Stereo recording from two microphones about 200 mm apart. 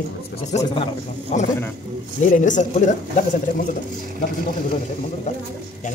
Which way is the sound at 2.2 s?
40° left (ahead or behind).